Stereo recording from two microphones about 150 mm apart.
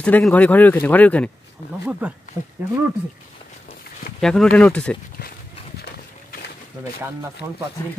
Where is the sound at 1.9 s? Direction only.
10° right (ahead or behind).